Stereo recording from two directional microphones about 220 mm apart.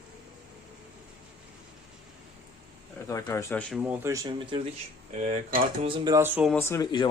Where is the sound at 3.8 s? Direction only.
10° right (ahead or behind).